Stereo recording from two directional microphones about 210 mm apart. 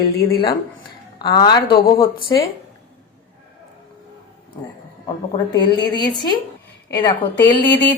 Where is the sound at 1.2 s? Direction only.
20° left (ahead or behind).